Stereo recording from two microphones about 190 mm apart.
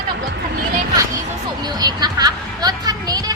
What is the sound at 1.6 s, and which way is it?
Speech, 20° right (ahead or behind).